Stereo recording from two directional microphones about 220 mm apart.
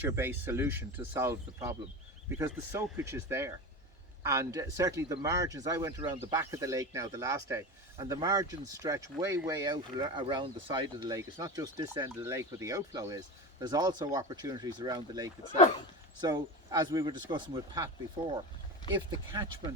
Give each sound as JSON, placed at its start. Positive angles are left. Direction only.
{"t": 0.0, "sound": "speech", "side_deg": -10}
{"t": 2.4, "sound": "speech", "side_deg": -10}
{"t": 18.8, "sound": "speech", "side_deg": 20}